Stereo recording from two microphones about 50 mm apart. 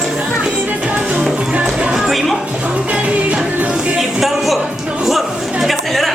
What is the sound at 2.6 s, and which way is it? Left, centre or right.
Music, right.